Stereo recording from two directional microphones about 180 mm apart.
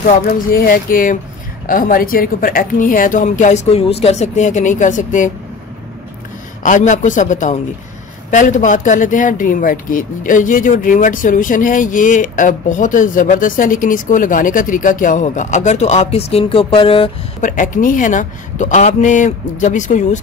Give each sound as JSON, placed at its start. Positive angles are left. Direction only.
{"t": 0.0, "sound": "speech", "side_deg": 50}
{"t": 6.6, "sound": "speech", "side_deg": 45}
{"t": 17.4, "sound": "speech", "side_deg": 45}